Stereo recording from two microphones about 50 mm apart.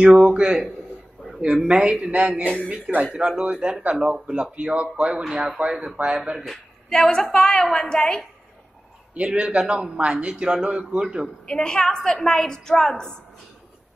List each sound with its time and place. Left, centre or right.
0.0 s a man's voice: right
2.4 s speech: left
3.0 s a man's voice: centre
6.9 s a woman's voice: centre
9.1 s a man's voice: right
11.4 s a woman's voice: centre